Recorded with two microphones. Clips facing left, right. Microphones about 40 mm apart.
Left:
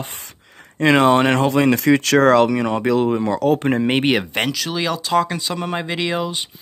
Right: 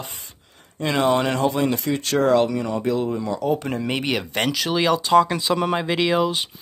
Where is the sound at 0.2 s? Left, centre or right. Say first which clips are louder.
Left 5 dB; left.